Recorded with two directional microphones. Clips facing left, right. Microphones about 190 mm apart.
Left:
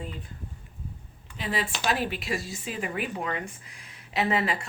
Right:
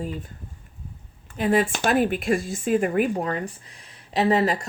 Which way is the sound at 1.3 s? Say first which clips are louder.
Right 10 dB; 50° right (ahead or behind).